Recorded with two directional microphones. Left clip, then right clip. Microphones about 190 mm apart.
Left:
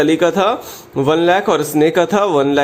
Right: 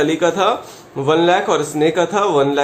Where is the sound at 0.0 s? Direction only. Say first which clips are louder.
Left 2 dB; 35° left (ahead or behind).